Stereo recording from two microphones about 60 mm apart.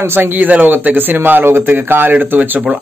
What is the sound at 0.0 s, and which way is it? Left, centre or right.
Speech, right.